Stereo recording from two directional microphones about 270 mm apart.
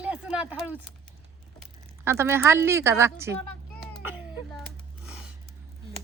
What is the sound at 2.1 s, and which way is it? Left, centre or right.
Speech, centre.